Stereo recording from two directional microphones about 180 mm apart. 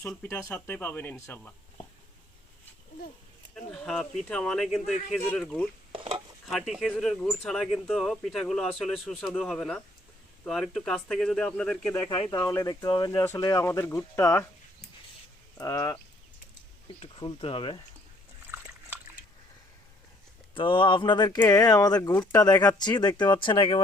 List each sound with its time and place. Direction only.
0.2 s speech: 15° left (ahead or behind)
3.5 s speech: centre (ahead or behind)
5.9 s a sound: 30° right (ahead or behind)
6.4 s speech: centre (ahead or behind)
12.0 s speech: 25° left (ahead or behind)
15.5 s speech: 20° left (ahead or behind)
17.0 s speech: 30° left (ahead or behind)
20.5 s speech: 30° left (ahead or behind)